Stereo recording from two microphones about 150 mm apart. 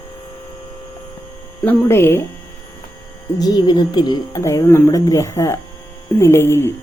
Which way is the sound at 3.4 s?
25° left (ahead or behind).